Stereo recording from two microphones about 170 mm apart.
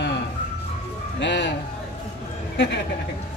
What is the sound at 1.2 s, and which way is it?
Speech, 90° left.